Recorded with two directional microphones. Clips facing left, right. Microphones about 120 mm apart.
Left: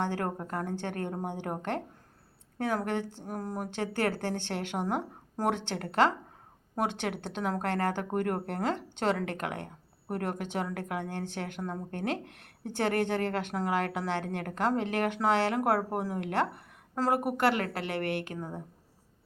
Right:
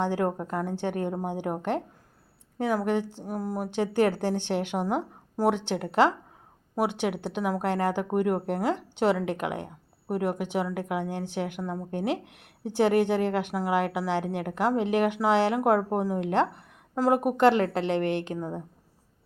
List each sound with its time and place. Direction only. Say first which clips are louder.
0.0 s speech: right 5 dB; 15° right (ahead or behind)